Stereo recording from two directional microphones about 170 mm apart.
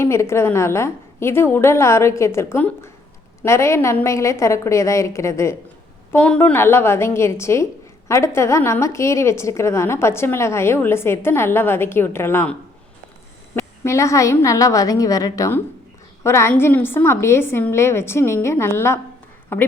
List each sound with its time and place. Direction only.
0.0 s a woman's voice: 15° left (ahead or behind)
13.6 s a woman's voice: 15° left (ahead or behind)